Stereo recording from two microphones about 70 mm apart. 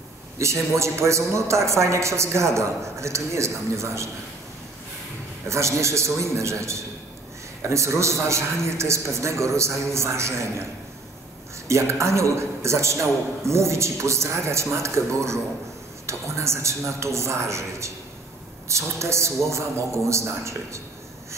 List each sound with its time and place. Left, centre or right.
0.4 s a man's voice: right
5.5 s a man's voice: right
11.6 s a man's voice: right